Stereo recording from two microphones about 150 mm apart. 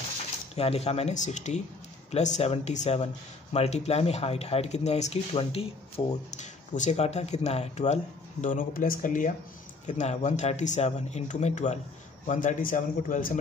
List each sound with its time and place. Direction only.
0.6 s speech: 40° left (ahead or behind)
6.3 s a man's voice: 55° left (ahead or behind)